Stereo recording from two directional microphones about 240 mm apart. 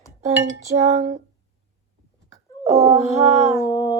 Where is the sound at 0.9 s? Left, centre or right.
Right.